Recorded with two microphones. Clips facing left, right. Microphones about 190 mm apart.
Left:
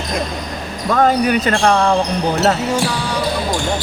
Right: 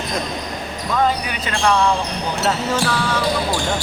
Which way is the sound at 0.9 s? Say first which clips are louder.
Left 6 dB; 50° left (ahead or behind).